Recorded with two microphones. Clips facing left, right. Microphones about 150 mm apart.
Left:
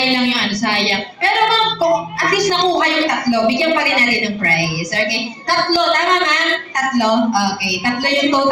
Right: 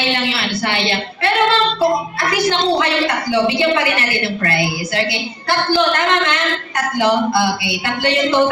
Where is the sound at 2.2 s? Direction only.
40° left (ahead or behind).